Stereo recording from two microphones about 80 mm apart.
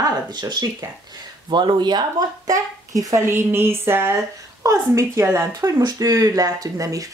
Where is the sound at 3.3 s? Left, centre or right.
Right.